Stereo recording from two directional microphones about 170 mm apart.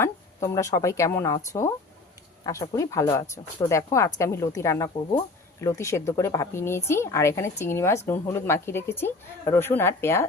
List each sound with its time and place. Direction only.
0.0 s speech: 15° left (ahead or behind)
2.4 s speech: 20° left (ahead or behind)